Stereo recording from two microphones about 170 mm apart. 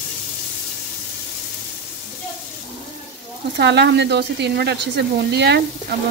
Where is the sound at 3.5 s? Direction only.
90° right.